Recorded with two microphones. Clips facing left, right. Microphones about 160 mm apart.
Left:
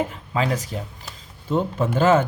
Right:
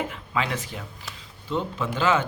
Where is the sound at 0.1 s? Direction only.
35° left (ahead or behind).